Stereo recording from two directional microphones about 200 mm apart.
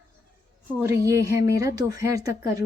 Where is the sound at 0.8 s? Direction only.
15° right (ahead or behind).